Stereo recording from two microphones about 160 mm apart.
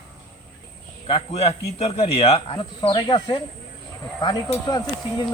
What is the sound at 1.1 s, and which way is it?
Speech, 40° left (ahead or behind).